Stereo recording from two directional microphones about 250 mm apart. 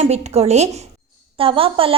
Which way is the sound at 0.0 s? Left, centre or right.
Right.